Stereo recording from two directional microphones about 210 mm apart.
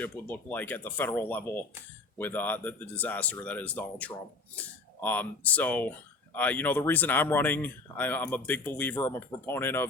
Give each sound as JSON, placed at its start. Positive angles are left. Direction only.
{"t": 0.0, "sound": "speech", "side_deg": 10}